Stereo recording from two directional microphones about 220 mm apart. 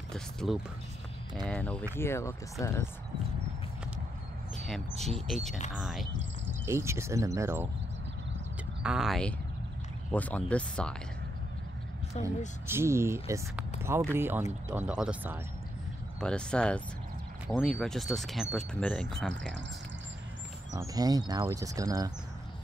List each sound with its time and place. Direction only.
0.1 s music: centre (ahead or behind)
1.5 s speech: 5° left (ahead or behind)
4.6 s speech: centre (ahead or behind)
6.6 s speech: 10° right (ahead or behind)
8.8 s speech: centre (ahead or behind)
12.1 s speech: 30° left (ahead or behind)
12.6 s speech: 10° right (ahead or behind)
20.8 s speech: 15° right (ahead or behind)